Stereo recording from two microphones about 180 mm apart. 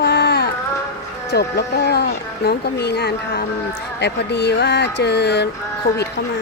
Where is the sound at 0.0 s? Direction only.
65° left (ahead or behind).